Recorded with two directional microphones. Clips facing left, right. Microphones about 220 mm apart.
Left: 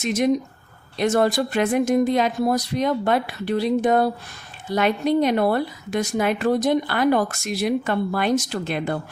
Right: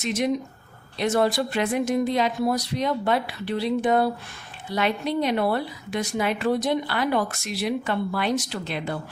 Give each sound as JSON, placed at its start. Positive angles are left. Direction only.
{"t": 0.0, "sound": "a woman's voice", "side_deg": 50}